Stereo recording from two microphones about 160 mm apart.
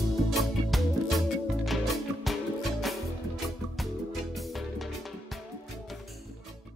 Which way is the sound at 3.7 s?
Centre (ahead or behind).